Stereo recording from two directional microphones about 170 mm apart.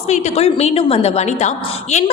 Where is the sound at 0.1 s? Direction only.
40° left (ahead or behind).